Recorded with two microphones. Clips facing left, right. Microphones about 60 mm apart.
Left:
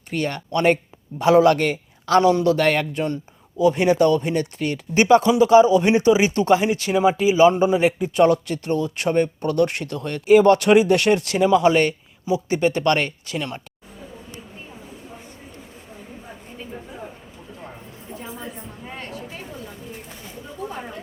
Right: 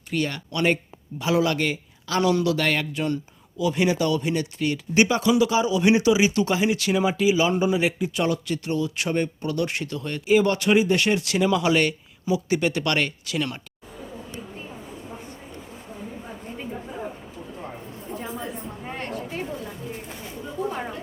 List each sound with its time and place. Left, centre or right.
0.1 s a man's voice: left
2.2 s speech: left
11.4 s speech: left